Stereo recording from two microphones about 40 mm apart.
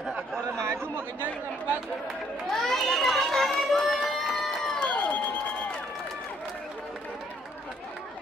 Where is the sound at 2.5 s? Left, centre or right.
Centre.